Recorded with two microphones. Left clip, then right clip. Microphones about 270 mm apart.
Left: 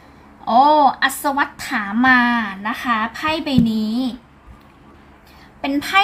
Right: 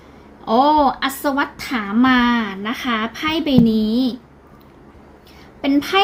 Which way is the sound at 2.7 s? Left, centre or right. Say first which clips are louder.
Left 2 dB; left.